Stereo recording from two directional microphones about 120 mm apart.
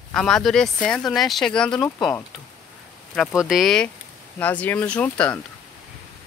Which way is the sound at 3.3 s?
Centre (ahead or behind).